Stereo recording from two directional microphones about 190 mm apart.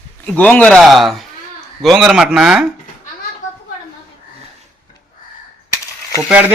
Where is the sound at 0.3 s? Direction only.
5° left (ahead or behind).